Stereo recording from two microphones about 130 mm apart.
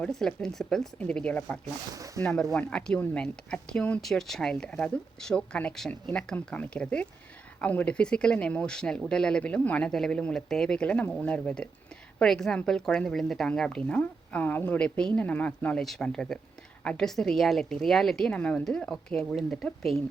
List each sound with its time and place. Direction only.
0.0 s speech: 5° left (ahead or behind)
1.9 s speech: 25° right (ahead or behind)
2.2 s a woman's voice: 5° left (ahead or behind)